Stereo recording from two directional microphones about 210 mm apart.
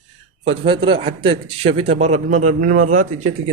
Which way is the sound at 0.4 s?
25° right (ahead or behind).